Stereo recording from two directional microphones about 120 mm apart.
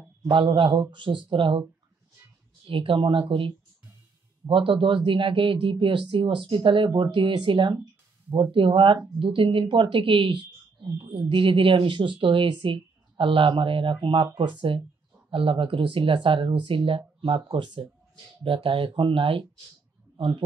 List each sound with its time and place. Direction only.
0.2 s speech: 45° right (ahead or behind)
2.6 s speech: 45° right (ahead or behind)